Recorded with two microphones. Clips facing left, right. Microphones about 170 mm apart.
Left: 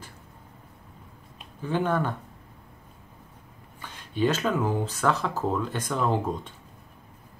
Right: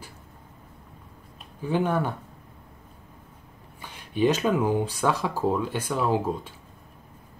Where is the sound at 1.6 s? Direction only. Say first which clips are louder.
Right 1 dB; 10° right (ahead or behind).